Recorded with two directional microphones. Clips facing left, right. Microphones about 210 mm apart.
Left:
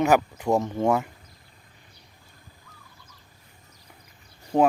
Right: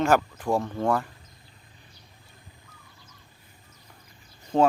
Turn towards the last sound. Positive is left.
turn(degrees=10)  # may be behind; listen again after turning